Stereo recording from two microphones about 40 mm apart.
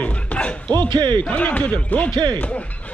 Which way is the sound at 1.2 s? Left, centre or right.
Left.